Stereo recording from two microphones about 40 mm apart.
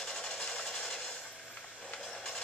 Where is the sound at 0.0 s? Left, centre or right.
Centre.